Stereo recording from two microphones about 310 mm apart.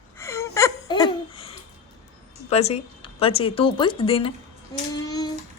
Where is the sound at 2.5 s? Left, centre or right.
Left.